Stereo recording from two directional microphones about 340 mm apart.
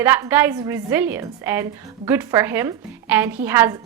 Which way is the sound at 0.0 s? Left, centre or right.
Centre.